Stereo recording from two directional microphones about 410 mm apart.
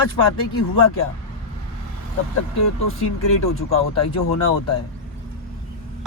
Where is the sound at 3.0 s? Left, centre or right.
Left.